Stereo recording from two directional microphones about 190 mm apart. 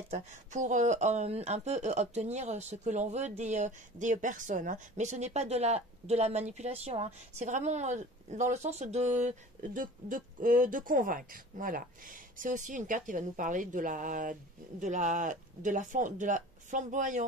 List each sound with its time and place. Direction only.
0.1 s speech: 40° right (ahead or behind)